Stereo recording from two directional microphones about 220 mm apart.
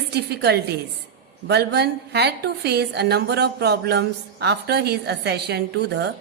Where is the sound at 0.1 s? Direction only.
50° right (ahead or behind).